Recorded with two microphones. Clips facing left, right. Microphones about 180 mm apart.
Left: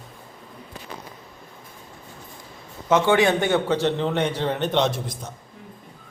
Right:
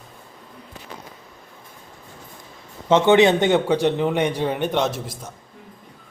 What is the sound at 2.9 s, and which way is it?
A man's voice, 20° right (ahead or behind).